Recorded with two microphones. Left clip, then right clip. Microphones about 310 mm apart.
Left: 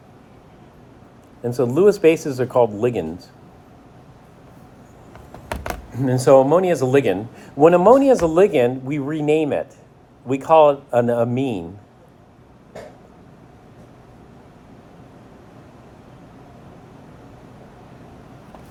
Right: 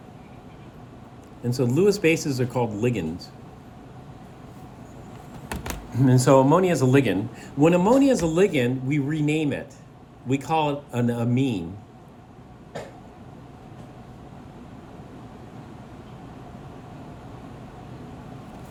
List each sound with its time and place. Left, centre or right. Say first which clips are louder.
1.5 s a man's voice: left 6 dB; centre
5.9 s a man's voice: left 5 dB; centre